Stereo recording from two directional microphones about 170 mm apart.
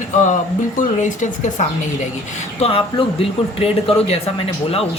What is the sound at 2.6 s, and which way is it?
Speech, 35° left (ahead or behind).